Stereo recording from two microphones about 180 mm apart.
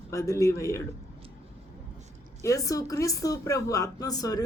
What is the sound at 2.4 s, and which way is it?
A woman's voice, 20° left (ahead or behind).